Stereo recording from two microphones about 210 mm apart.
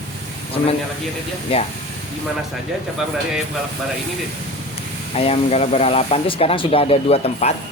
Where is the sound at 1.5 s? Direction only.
25° left (ahead or behind).